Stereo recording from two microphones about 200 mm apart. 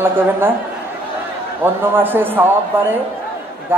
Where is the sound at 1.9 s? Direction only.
10° right (ahead or behind).